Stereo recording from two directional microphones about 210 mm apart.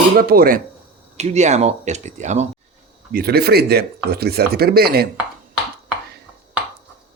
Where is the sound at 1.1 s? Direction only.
35° right (ahead or behind).